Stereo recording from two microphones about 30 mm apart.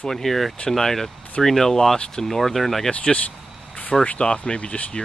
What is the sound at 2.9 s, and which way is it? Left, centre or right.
Speech, left.